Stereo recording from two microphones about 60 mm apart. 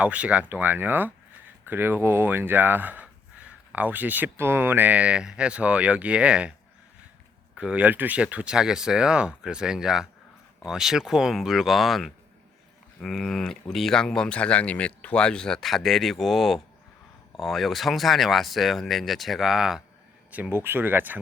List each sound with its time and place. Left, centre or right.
0.0 s speech: right
0.5 s speech: right
4.4 s speech: right; by 6.5 s centre
7.5 s speech: centre
20.5 s speech: right